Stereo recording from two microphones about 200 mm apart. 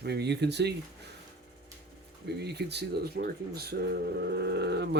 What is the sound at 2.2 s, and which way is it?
Speech, 55° right (ahead or behind).